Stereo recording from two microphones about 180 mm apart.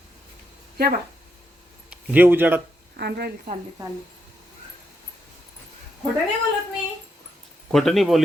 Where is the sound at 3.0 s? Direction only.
65° right (ahead or behind).